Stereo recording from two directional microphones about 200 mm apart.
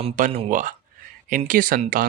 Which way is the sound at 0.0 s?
30° right (ahead or behind).